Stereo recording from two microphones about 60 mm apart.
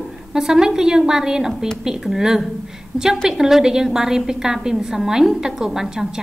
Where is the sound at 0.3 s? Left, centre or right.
Centre.